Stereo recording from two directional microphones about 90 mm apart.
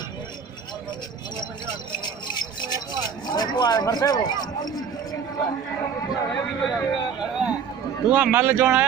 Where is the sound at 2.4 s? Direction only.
50° left (ahead or behind).